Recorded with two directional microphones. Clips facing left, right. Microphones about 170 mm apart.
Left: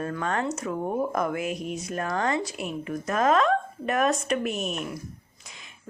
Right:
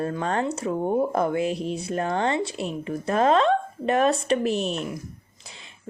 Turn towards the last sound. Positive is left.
turn(degrees=-30)  # may be behind; listen again after turning